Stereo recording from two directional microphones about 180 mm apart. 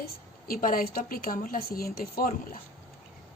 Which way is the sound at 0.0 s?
55° left (ahead or behind).